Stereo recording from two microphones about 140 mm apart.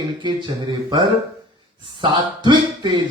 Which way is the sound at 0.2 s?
35° right (ahead or behind).